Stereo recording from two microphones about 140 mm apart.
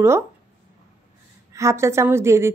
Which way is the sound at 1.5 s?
20° right (ahead or behind).